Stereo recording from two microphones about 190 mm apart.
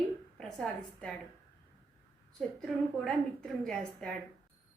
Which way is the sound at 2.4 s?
5° left (ahead or behind).